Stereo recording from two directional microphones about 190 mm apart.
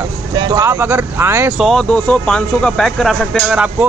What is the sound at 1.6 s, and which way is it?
A man's voice, centre (ahead or behind).